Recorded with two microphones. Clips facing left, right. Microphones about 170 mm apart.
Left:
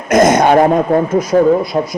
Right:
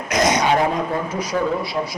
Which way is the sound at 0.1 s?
50° left (ahead or behind).